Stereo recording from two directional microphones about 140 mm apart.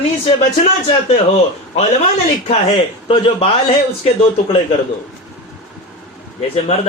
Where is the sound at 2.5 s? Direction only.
40° left (ahead or behind).